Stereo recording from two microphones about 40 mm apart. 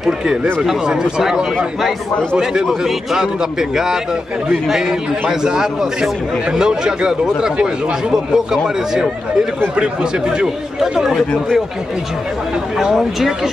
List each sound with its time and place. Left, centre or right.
0.2 s a man's voice: right
2.6 s a man's voice: centre
10.4 s a man's voice: centre
12.7 s a man's voice: centre